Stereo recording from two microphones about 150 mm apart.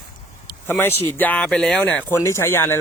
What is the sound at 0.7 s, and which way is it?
Speech, 15° left (ahead or behind).